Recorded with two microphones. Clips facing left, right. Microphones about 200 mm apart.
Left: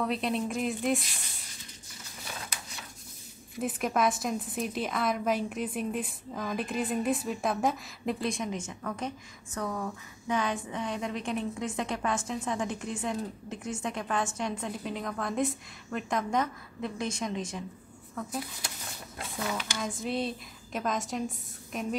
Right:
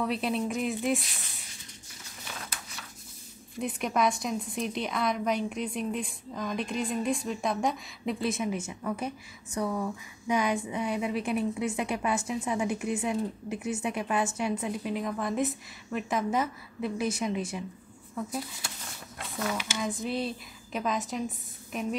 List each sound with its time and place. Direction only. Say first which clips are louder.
0.0 s a woman's voice: right 1 dB; centre (ahead or behind)
3.5 s a woman's voice: even; centre (ahead or behind)
20.0 s a woman's voice: even; centre (ahead or behind)